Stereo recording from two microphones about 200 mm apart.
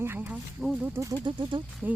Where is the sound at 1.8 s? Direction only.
10° right (ahead or behind).